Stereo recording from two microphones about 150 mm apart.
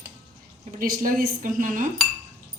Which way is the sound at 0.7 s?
70° right (ahead or behind).